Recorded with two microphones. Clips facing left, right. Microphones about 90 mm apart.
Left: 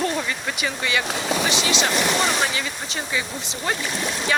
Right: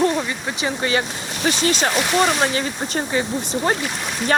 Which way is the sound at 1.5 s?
45° right (ahead or behind).